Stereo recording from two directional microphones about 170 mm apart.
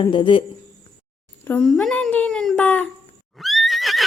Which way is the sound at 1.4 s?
5° left (ahead or behind).